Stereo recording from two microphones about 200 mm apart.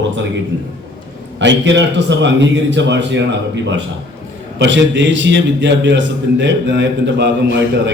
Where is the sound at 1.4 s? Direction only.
65° right (ahead or behind).